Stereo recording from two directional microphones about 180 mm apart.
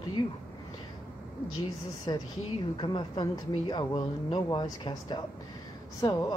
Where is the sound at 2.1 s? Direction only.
30° left (ahead or behind).